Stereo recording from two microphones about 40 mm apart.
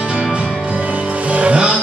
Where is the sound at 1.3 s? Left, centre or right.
Right.